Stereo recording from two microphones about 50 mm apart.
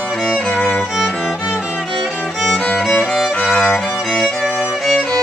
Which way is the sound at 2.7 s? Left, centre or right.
Centre.